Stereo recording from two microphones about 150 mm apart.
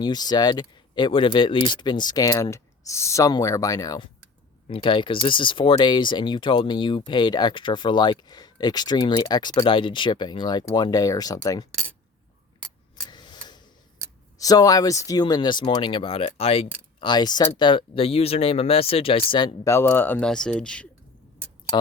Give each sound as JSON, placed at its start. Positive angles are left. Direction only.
{"t": 0.0, "sound": "speech", "side_deg": 30}
{"t": 13.1, "sound": "a sound", "side_deg": 30}
{"t": 14.3, "sound": "speech", "side_deg": 25}
{"t": 17.0, "sound": "speech", "side_deg": 30}
{"t": 19.6, "sound": "speech", "side_deg": 15}